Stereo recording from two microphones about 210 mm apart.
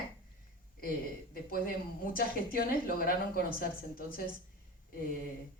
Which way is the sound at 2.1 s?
45° left (ahead or behind).